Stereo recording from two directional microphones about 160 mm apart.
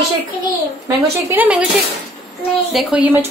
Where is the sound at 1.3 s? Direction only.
10° right (ahead or behind).